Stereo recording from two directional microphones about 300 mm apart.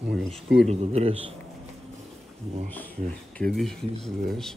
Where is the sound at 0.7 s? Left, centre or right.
Right.